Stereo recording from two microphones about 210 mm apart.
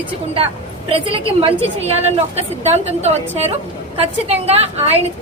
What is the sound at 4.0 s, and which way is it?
Speech, 30° right (ahead or behind).